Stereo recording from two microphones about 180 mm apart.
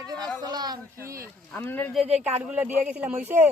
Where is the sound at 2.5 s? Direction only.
10° right (ahead or behind).